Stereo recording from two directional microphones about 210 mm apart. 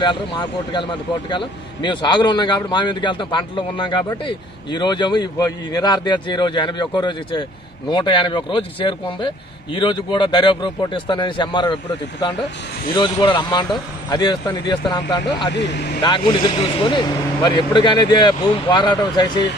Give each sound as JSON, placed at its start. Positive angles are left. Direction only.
{"t": 0.0, "sound": "a man's voice", "side_deg": 20}
{"t": 12.9, "sound": "a man's voice", "side_deg": 20}
{"t": 15.5, "sound": "speech", "side_deg": 55}
{"t": 16.0, "sound": "a man's voice", "side_deg": 25}